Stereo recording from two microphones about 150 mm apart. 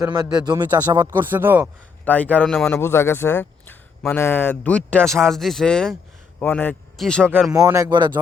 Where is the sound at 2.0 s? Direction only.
10° left (ahead or behind).